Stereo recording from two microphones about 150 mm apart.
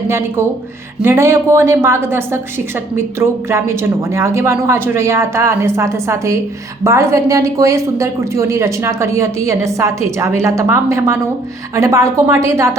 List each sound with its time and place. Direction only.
0.1 s a woman's voice: 15° right (ahead or behind)